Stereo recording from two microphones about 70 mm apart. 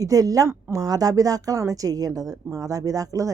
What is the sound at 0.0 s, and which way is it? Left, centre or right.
Speech, right.